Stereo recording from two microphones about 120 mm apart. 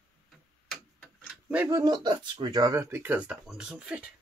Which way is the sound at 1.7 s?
30° right (ahead or behind).